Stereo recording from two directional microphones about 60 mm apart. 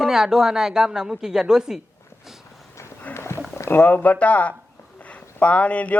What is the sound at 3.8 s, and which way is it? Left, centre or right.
A man's voice, left.